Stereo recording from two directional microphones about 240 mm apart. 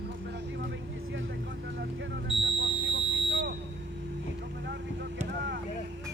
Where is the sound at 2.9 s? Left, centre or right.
Right.